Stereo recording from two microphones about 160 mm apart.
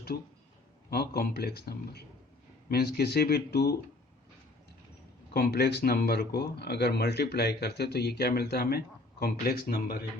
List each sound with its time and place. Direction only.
0.9 s a man's voice: 75° left (ahead or behind)
5.3 s speech: 85° left